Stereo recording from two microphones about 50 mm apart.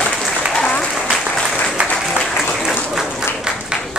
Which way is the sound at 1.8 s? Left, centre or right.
Right.